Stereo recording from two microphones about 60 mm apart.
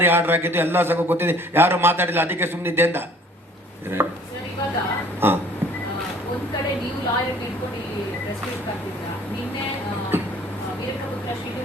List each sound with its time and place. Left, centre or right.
0.0 s a man's voice: right
4.0 s a man's voice: right
5.2 s a man's voice: right
10.1 s a sound: right